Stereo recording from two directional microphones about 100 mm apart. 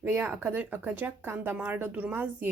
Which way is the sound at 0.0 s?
15° right (ahead or behind).